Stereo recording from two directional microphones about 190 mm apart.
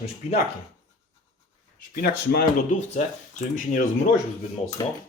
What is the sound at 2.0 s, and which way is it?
Speech, 50° left (ahead or behind).